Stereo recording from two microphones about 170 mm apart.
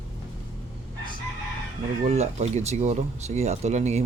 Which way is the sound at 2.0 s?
40° right (ahead or behind).